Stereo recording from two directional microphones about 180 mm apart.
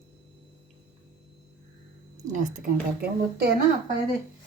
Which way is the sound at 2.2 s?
45° right (ahead or behind).